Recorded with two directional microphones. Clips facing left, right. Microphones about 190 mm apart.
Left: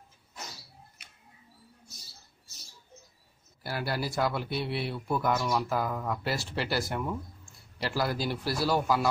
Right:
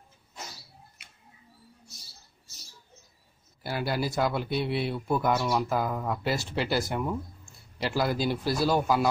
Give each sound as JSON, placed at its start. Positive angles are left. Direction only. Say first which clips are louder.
{"t": 3.6, "sound": "speech", "louder": "right 3 dB", "side_deg": -20}